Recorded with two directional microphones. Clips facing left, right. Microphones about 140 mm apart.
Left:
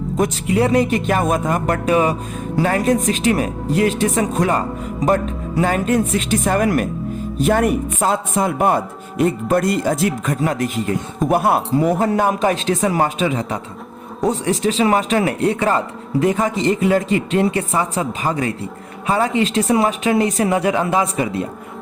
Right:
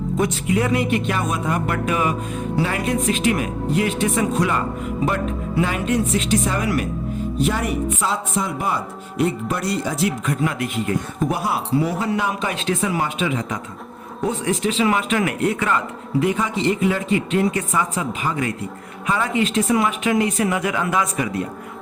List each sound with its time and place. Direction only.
0.5 s speech: 35° left (ahead or behind)
11.3 s speech: 55° left (ahead or behind); by 21.4 s 30° left (ahead or behind)